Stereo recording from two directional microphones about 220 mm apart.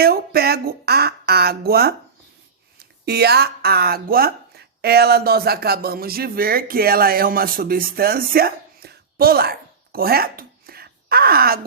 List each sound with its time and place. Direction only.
0.0 s speech: 45° right (ahead or behind)